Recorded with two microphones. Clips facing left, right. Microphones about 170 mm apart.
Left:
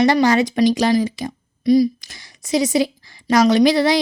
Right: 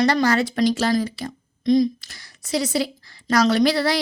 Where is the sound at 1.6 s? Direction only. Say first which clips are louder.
Left 3 dB; 10° left (ahead or behind).